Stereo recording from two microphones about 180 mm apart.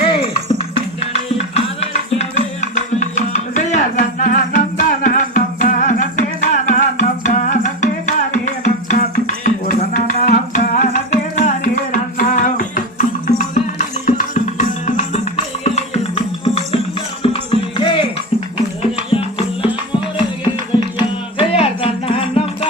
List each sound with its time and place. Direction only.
0.0 s music: 30° left (ahead or behind)